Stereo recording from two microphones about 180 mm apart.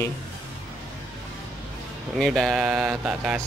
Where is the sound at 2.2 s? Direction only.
Centre (ahead or behind).